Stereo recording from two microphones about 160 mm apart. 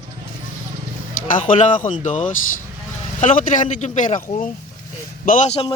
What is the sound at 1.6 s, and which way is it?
A man's voice, 55° left (ahead or behind).